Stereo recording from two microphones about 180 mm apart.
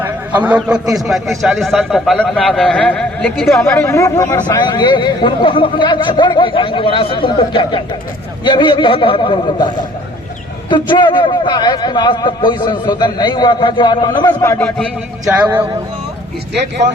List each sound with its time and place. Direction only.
0.0 s a man's voice: 10° right (ahead or behind)
3.6 s speech: 15° left (ahead or behind)
14.6 s a man's voice: 5° left (ahead or behind)